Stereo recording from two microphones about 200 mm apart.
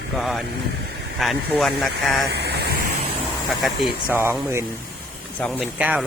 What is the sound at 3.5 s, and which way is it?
Speech, centre (ahead or behind).